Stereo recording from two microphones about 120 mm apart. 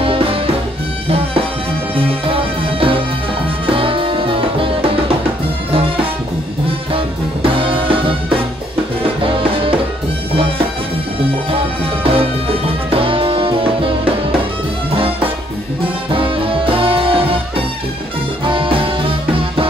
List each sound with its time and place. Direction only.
0.0 s music: 50° right (ahead or behind)
7.4 s music: 50° right (ahead or behind)
9.2 s music: 50° right (ahead or behind)
11.5 s music: 50° right (ahead or behind)
16.1 s music: 50° right (ahead or behind)
18.4 s music: 45° right (ahead or behind)